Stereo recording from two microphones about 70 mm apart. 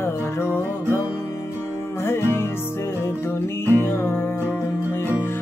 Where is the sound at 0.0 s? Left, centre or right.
Left.